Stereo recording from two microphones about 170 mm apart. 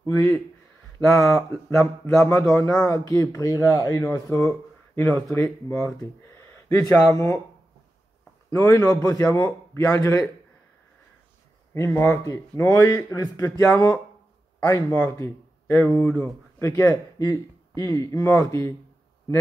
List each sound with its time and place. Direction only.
0.0 s speech: 15° left (ahead or behind)
8.5 s speech: 15° left (ahead or behind)
11.7 s speech: 15° left (ahead or behind)